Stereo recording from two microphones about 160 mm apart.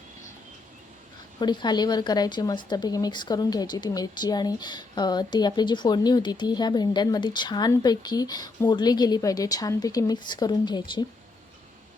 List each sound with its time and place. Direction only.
1.4 s speech: 25° left (ahead or behind)